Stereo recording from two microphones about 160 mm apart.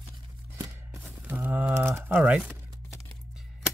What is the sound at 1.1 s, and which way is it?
Speech, 10° right (ahead or behind).